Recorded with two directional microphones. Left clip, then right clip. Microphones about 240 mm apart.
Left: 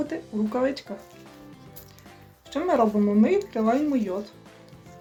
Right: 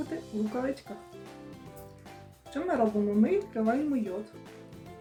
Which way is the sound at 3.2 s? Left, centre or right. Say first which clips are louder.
Left 5 dB; centre.